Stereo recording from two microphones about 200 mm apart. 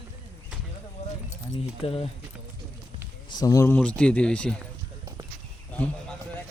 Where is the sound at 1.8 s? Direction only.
30° left (ahead or behind).